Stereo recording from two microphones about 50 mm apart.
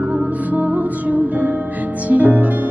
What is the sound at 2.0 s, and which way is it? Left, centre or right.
Music, right.